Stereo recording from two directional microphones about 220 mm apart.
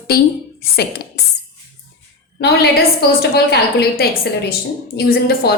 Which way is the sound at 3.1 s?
45° left (ahead or behind).